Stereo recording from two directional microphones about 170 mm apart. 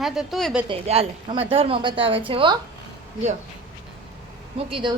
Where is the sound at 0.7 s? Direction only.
35° right (ahead or behind).